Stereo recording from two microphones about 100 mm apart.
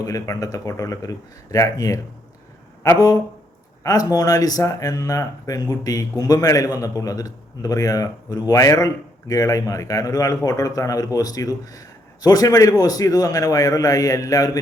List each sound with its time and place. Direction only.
0.0 s speech: 35° left (ahead or behind)
3.8 s speech: 40° left (ahead or behind)